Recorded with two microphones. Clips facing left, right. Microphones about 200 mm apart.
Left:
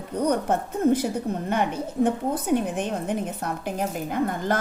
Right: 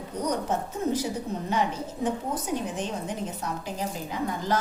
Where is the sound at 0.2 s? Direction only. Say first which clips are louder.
Left 5 dB; 60° left (ahead or behind).